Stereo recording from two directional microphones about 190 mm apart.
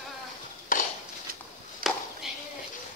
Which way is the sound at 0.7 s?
45° left (ahead or behind).